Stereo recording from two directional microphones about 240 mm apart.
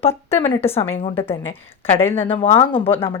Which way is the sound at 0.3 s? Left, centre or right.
Centre.